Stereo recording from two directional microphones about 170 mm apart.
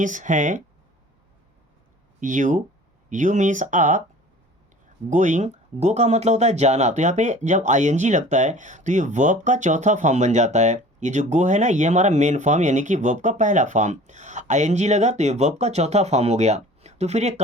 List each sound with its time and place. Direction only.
0.0 s speech: 50° right (ahead or behind)
2.2 s speech: 50° right (ahead or behind)
5.0 s speech: 45° right (ahead or behind)